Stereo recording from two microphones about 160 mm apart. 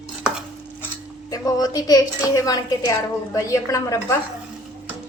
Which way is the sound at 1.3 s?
25° left (ahead or behind).